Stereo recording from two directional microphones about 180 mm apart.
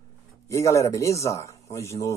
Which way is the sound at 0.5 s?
15° left (ahead or behind).